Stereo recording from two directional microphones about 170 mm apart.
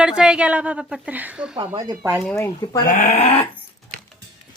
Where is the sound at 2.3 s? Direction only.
15° left (ahead or behind).